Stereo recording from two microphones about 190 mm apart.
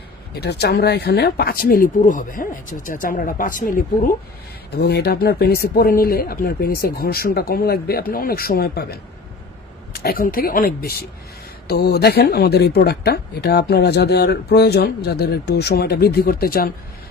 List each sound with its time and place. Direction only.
0.3 s speech: 60° left (ahead or behind)
4.8 s speech: 55° left (ahead or behind)